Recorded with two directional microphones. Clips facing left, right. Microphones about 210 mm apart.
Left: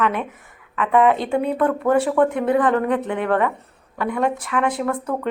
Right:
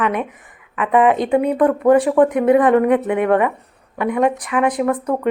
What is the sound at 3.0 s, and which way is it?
A woman's voice, 5° right (ahead or behind).